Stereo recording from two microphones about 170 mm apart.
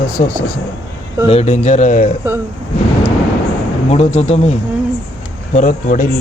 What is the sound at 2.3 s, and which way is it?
Speech, 15° right (ahead or behind).